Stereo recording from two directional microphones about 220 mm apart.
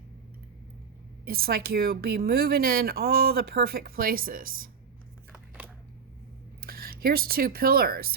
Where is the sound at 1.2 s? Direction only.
45° right (ahead or behind).